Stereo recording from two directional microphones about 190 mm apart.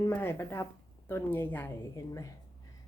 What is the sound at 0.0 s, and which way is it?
A woman's voice, 10° left (ahead or behind).